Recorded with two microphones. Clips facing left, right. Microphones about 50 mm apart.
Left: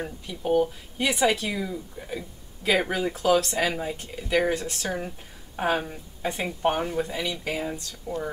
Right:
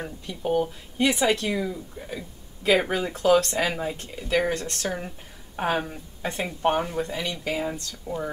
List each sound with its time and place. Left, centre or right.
0.0 s speech: centre
8.1 s speech: left